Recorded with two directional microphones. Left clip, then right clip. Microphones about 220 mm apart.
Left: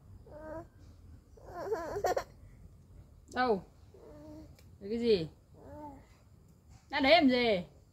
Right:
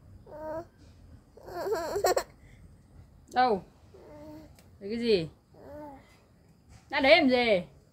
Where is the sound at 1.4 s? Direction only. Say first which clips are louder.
Right 5 dB; 45° right (ahead or behind).